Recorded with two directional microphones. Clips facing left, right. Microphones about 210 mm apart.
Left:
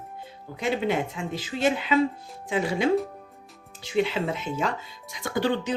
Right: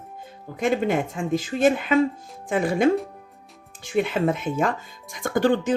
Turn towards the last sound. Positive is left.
turn(degrees=-50)  # may be behind; listen again after turning